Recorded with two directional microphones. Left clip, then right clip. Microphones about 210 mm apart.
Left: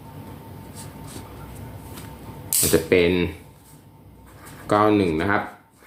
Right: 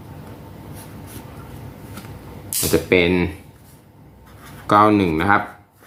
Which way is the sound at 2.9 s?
20° right (ahead or behind).